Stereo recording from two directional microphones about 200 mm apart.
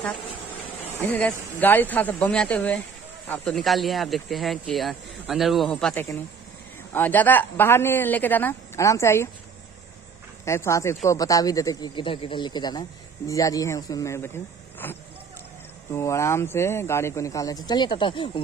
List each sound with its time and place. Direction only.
1.0 s speech: 10° left (ahead or behind)
10.4 s speech: 15° left (ahead or behind)